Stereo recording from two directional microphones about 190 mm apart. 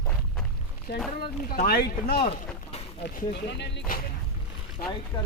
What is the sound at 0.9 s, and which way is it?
A man's voice, 55° left (ahead or behind).